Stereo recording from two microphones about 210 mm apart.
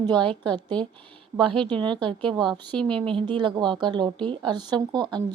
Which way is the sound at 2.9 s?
25° right (ahead or behind).